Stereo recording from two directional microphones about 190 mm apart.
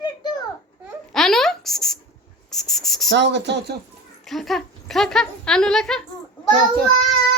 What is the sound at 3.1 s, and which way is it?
Speech, 65° right (ahead or behind).